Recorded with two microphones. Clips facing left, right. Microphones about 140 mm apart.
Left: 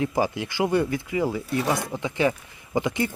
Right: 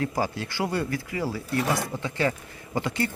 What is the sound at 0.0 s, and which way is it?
Speech, 20° left (ahead or behind).